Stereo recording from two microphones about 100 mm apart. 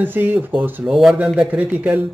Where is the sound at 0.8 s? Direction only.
5° right (ahead or behind).